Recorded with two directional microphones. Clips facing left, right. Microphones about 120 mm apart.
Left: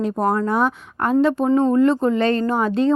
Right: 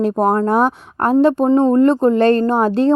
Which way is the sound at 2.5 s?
35° right (ahead or behind).